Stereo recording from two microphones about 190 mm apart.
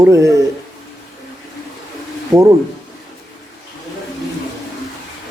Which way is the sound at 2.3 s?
15° right (ahead or behind).